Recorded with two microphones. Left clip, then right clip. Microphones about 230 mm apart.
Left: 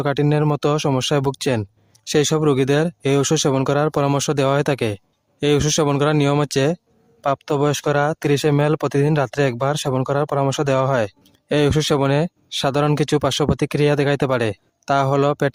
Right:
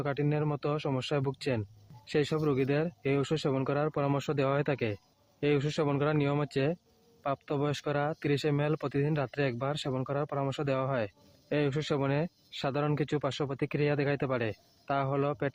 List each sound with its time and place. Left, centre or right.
0.0 s speech: left